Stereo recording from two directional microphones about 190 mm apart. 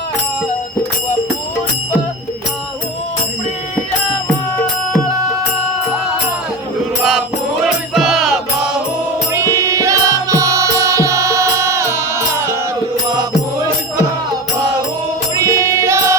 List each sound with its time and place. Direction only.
7.9 s music: centre (ahead or behind)
9.3 s music: 15° right (ahead or behind)
15.4 s music: 15° right (ahead or behind)